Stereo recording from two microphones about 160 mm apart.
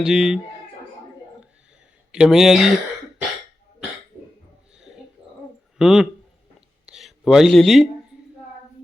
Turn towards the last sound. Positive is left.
turn(degrees=0)  # may be behind; listen again after turning